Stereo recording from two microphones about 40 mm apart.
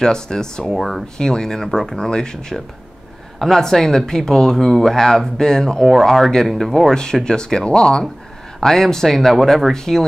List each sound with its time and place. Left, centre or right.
0.0 s speech: centre
0.7 s speech: centre
1.1 s speech: centre
3.3 s speech: centre
5.9 s speech: centre; by 8.1 s left
8.5 s speech: centre
9.7 s speech: centre